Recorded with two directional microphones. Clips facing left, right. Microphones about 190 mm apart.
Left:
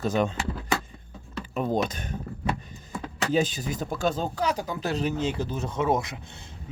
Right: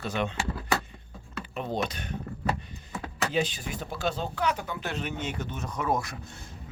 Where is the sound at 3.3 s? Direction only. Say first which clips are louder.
Left 5 dB; 40° left (ahead or behind); by 6.1 s 20° left (ahead or behind).